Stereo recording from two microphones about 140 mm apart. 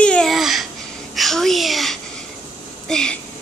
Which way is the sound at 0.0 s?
5° left (ahead or behind).